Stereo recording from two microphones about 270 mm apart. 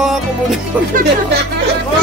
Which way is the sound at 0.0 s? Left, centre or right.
Centre.